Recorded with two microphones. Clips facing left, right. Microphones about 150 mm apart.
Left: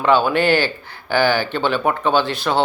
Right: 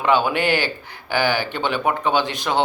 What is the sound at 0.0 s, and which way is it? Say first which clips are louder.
Speech: left 3 dB; 15° right (ahead or behind).